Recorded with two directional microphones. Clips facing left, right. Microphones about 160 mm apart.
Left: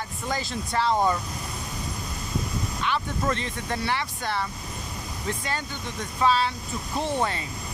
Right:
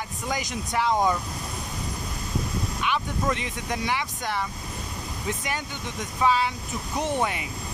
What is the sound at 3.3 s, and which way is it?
Speech, 15° right (ahead or behind).